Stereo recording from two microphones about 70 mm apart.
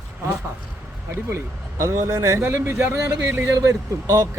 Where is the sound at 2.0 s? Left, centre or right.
Right.